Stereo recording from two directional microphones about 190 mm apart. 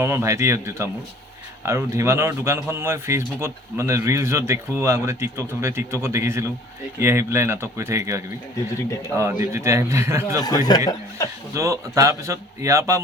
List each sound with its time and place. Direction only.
0.0 s a man's voice: 15° right (ahead or behind)
10.7 s speech: 20° left (ahead or behind)
11.5 s a man's voice: 15° right (ahead or behind)